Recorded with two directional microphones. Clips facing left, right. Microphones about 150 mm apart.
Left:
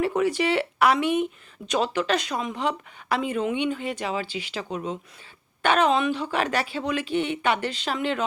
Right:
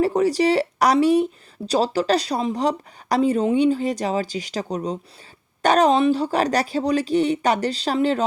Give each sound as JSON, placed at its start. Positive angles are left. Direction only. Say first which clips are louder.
{"t": 0.0, "sound": "speech", "louder": "right 5 dB", "side_deg": -35}